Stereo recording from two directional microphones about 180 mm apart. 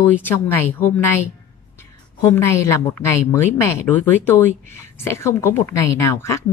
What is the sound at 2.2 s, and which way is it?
A woman's voice, 15° left (ahead or behind).